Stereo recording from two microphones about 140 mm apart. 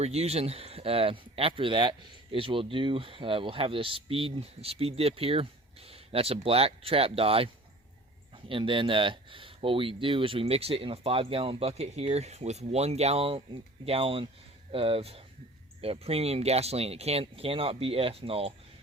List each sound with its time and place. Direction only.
0.0 s speech: 50° right (ahead or behind)